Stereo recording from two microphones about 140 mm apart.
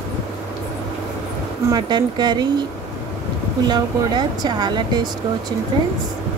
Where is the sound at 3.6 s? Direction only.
30° right (ahead or behind).